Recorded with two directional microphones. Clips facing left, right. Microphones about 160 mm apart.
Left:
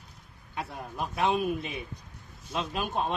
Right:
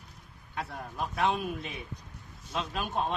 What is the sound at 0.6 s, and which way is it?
Speech, 10° left (ahead or behind).